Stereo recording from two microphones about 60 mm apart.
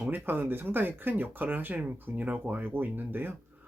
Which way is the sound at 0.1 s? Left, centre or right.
Right.